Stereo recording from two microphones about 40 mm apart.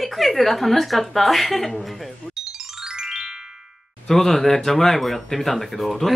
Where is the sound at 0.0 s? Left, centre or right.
Centre.